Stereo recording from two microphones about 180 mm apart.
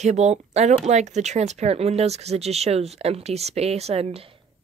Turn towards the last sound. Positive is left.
turn(degrees=-30)  # may be behind; listen again after turning